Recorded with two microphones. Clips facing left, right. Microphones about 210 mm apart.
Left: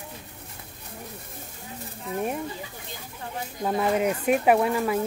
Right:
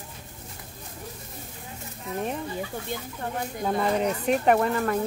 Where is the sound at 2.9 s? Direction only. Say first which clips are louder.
Right 8 dB; 60° right (ahead or behind).